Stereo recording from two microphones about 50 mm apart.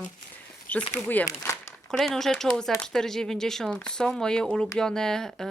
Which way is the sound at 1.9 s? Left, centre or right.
Centre.